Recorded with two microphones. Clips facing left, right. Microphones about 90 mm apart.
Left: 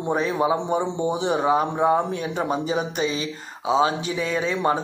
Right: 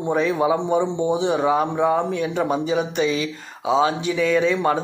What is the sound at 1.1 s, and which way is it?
A man's voice, 45° left (ahead or behind).